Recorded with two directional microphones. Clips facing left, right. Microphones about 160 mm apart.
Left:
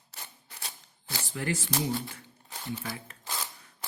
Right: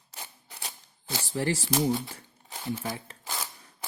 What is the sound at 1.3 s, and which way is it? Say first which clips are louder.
Speech: right 4 dB; 35° right (ahead or behind).